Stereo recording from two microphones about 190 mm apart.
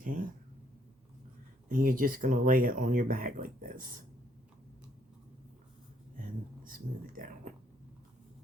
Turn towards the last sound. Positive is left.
turn(degrees=-45)  # may be behind; listen again after turning